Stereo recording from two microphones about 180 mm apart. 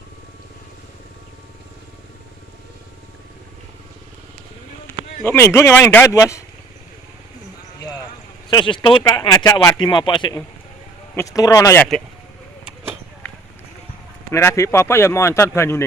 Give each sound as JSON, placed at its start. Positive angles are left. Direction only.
{"t": 5.2, "sound": "speech", "side_deg": 10}
{"t": 8.4, "sound": "speech", "side_deg": 25}
{"t": 11.8, "sound": "speech", "side_deg": 5}
{"t": 14.3, "sound": "speech", "side_deg": 15}